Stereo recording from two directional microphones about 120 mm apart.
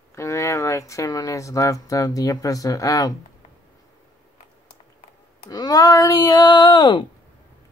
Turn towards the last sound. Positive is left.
turn(degrees=40)  # may be behind; listen again after turning